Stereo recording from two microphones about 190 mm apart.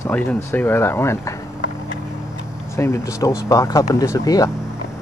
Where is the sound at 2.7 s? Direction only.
15° left (ahead or behind).